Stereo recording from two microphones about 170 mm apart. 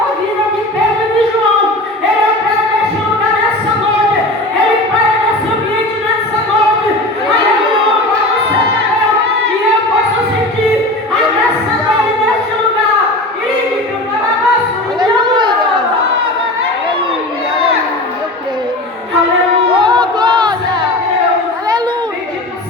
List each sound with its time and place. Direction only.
15.0 s chatter: 25° right (ahead or behind)
19.8 s crowd: 25° right (ahead or behind)